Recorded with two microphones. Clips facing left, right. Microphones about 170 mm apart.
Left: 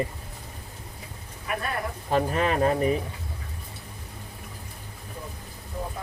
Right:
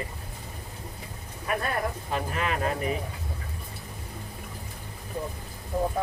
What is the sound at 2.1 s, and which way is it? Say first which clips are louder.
Speech: left 8 dB; 35° left (ahead or behind).